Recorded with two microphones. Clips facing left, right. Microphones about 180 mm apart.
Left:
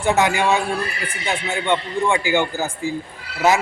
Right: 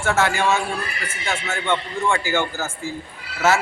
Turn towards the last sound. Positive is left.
turn(degrees=15)  # may be behind; listen again after turning